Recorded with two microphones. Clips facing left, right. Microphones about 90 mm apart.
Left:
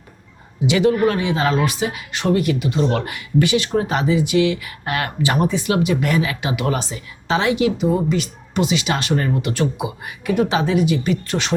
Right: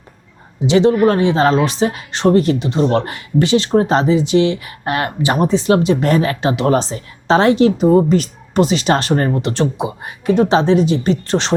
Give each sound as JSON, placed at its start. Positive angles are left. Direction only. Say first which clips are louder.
{"t": 0.6, "sound": "speech", "louder": "right 4 dB", "side_deg": -25}